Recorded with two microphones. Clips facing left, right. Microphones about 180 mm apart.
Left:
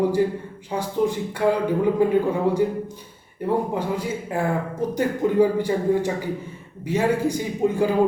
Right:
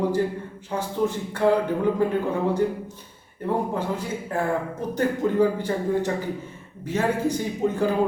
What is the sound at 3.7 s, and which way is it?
Speech, 10° left (ahead or behind).